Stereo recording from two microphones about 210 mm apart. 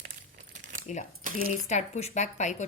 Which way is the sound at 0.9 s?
35° left (ahead or behind).